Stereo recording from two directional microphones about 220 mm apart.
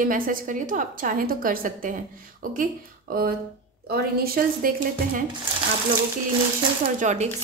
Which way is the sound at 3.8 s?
45° right (ahead or behind).